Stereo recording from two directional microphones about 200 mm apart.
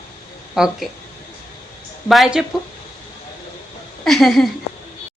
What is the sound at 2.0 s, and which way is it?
Speech, centre (ahead or behind).